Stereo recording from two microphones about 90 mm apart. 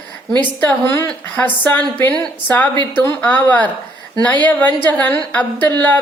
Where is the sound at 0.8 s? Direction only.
30° left (ahead or behind).